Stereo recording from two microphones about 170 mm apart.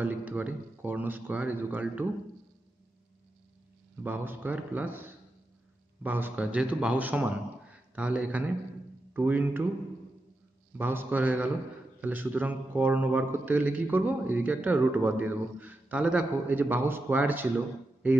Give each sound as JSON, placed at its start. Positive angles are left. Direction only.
{"t": 0.0, "sound": "a man's voice", "side_deg": -10}
{"t": 4.0, "sound": "a man's voice", "side_deg": -10}
{"t": 10.8, "sound": "a man's voice", "side_deg": -10}